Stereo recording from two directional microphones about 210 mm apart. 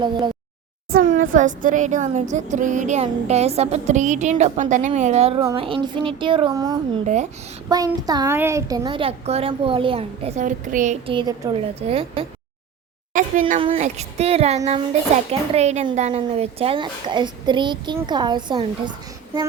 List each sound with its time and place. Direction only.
0.9 s a woman's voice: 40° right (ahead or behind); by 7.0 s 20° right (ahead or behind)
7.0 s speech: 35° right (ahead or behind)
7.7 s a woman's voice: 15° right (ahead or behind); by 10.9 s 40° right (ahead or behind)
11.0 s a woman's voice: 25° right (ahead or behind)
13.1 s a woman's voice: 40° right (ahead or behind); by 18.6 s 20° right (ahead or behind)